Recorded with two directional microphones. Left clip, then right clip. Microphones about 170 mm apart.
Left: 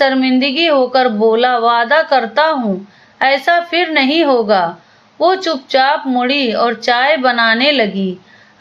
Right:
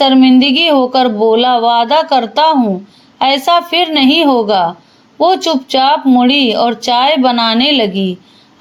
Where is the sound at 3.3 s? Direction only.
20° right (ahead or behind).